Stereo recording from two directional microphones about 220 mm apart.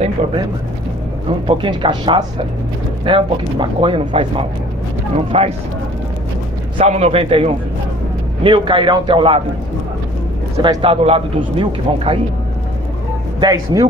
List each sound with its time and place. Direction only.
1.5 s speech: 20° right (ahead or behind)
6.8 s speech: 30° right (ahead or behind)
10.6 s speech: 25° right (ahead or behind)
13.4 s speech: 15° right (ahead or behind)